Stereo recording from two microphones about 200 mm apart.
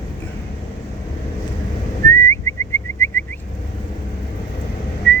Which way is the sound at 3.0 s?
10° left (ahead or behind).